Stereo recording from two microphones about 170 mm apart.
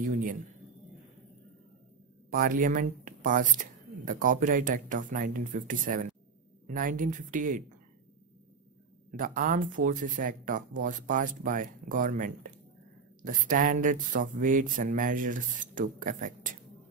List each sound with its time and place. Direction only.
0.0 s a man's voice: 50° right (ahead or behind)
2.3 s speech: 55° right (ahead or behind)
9.1 s speech: 55° right (ahead or behind)